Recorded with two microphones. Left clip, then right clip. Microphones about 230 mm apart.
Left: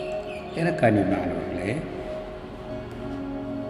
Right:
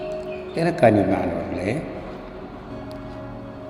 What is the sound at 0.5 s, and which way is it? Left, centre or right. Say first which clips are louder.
A man's voice: right 5 dB; right.